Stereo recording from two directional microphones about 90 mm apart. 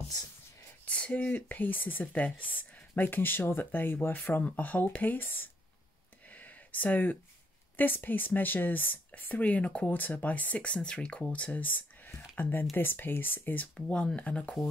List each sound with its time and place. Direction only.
0.8 s speech: 15° left (ahead or behind)
6.3 s a sound: 20° left (ahead or behind)
7.7 s speech: 20° left (ahead or behind)
13.7 s speech: 10° left (ahead or behind)